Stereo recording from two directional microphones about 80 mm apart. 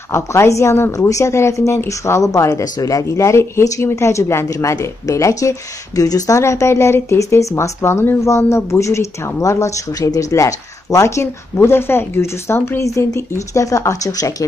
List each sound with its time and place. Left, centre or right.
0.1 s speech: left